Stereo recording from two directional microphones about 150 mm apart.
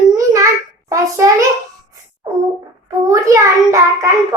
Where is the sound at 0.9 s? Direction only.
20° right (ahead or behind).